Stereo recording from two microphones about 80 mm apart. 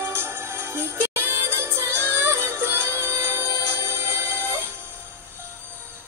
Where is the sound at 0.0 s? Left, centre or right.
Right.